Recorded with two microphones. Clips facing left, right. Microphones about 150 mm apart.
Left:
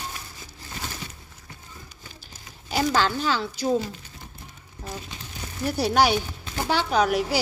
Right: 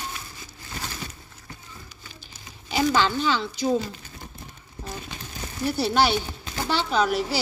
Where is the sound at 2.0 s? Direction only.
35° left (ahead or behind).